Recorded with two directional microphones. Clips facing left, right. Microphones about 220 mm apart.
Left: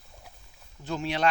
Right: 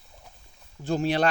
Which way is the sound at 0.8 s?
35° right (ahead or behind).